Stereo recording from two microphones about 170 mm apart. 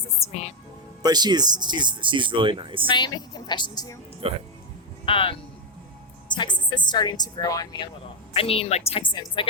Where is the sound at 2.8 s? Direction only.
25° left (ahead or behind).